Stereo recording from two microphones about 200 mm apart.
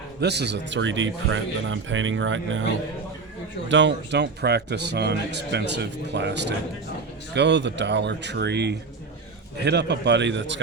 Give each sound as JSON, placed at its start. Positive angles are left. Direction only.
{"t": 0.2, "sound": "speech", "side_deg": -55}
{"t": 3.7, "sound": "speech", "side_deg": -65}